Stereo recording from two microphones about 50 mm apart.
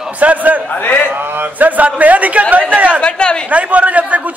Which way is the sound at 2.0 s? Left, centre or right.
Right.